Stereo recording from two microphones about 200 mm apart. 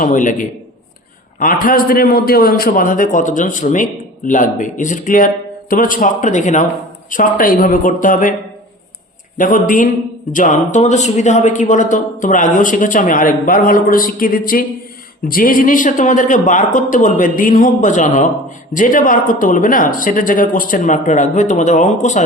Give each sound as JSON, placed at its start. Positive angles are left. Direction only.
{"t": 0.0, "sound": "a man's voice", "side_deg": 40}
{"t": 9.4, "sound": "a man's voice", "side_deg": 40}